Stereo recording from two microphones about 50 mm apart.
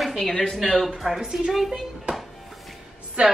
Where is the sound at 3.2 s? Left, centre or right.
Right.